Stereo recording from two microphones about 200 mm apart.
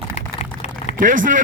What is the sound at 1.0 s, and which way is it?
Speech, 40° right (ahead or behind).